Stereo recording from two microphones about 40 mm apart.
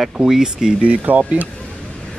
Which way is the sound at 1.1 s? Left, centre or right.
Right.